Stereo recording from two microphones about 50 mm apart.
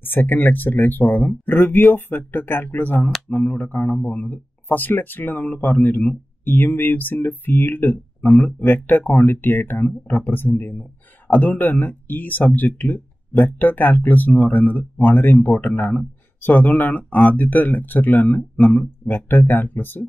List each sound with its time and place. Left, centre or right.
0.0 s speech: left
16.0 s a sound: left
16.5 s speech: left